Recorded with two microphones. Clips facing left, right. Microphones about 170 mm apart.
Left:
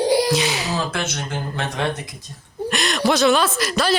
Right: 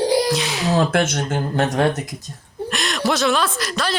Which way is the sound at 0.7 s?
60° right (ahead or behind).